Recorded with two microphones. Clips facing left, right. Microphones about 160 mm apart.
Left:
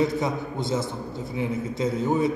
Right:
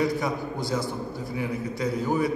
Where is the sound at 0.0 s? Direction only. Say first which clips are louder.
Left 2 dB; 20° left (ahead or behind).